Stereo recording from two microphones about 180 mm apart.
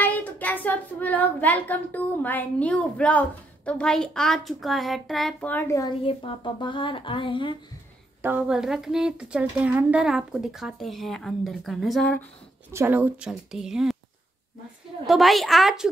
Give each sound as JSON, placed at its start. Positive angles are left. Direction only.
{"t": 0.0, "sound": "child singing", "side_deg": 10}
{"t": 6.0, "sound": "speech", "side_deg": 30}
{"t": 8.2, "sound": "a woman's voice", "side_deg": -10}
{"t": 12.7, "sound": "a woman's voice", "side_deg": -10}
{"t": 15.0, "sound": "a woman's voice", "side_deg": 0}